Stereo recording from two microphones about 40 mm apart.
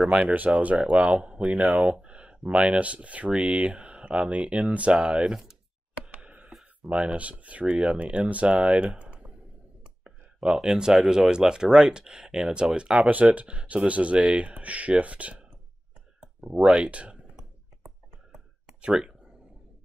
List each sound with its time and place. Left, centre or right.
0.3 s speech: right
1.1 s speech: right
5.3 s a sound: centre
6.0 s tick: right
6.8 s speech: centre
7.2 s speech: right
10.7 s speech: centre
13.1 s speech: right
16.4 s speech: centre
16.7 s speech: right
18.9 s speech: centre